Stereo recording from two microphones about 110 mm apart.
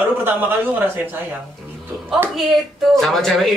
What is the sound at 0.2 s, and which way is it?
Speech, 20° right (ahead or behind).